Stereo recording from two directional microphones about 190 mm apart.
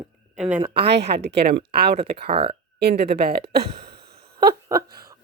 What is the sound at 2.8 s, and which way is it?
Speech, 60° right (ahead or behind).